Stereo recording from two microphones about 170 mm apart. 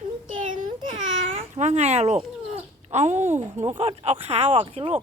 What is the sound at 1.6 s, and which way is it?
Speech, 40° right (ahead or behind).